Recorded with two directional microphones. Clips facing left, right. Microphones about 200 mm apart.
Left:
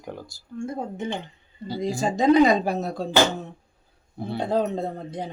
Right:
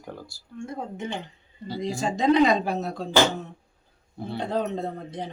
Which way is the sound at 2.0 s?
40° left (ahead or behind).